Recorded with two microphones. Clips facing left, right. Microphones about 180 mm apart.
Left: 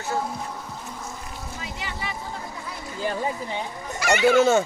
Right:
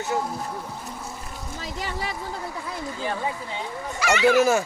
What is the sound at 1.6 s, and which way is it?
Speech, 40° right (ahead or behind).